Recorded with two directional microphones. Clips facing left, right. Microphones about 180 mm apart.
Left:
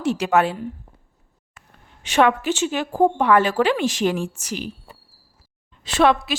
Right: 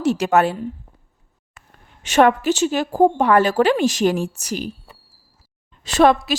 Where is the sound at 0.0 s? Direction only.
40° right (ahead or behind).